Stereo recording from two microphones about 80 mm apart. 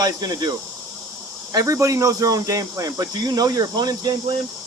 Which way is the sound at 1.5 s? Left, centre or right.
Right.